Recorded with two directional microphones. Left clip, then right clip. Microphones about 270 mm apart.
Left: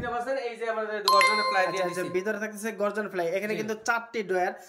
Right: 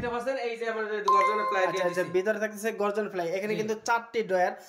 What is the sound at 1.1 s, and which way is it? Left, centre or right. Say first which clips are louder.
Speech: left 2 dB; left.